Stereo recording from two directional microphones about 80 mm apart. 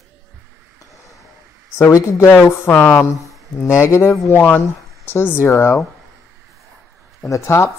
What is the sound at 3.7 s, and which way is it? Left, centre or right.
Speech, left.